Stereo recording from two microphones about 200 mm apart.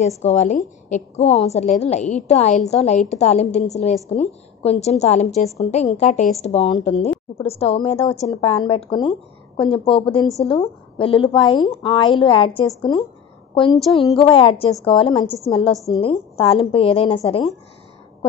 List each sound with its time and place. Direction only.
0.2 s a woman's voice: 35° left (ahead or behind)